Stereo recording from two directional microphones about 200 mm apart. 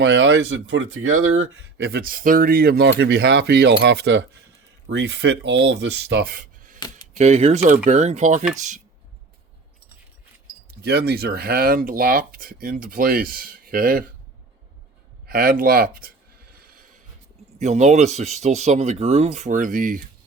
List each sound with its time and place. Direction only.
0.0 s speech: 60° right (ahead or behind); by 8.8 s 35° right (ahead or behind)
10.8 s speech: 50° right (ahead or behind)
15.3 s a sound: 45° right (ahead or behind)
17.6 s speech: 35° right (ahead or behind)